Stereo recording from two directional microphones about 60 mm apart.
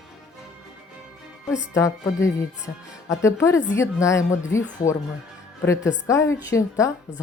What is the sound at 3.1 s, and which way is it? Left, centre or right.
A woman's voice, left.